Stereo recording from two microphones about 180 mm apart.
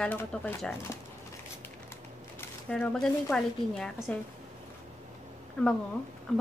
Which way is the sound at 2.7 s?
5° left (ahead or behind).